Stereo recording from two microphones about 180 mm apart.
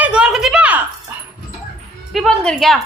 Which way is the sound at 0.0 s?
5° right (ahead or behind).